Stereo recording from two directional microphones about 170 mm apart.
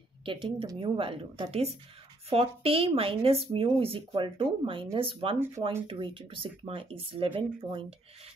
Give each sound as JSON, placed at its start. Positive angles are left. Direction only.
{"t": 0.2, "sound": "a woman's voice", "side_deg": -30}